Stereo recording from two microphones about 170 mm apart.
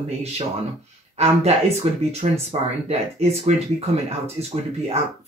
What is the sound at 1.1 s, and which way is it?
Speech, 40° right (ahead or behind).